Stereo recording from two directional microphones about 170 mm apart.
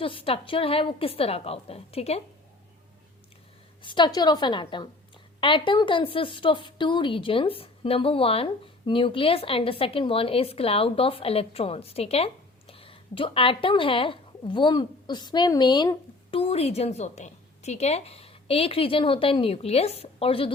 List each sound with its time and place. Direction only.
0.0 s a woman's voice: 30° left (ahead or behind)
3.8 s a woman's voice: 25° left (ahead or behind)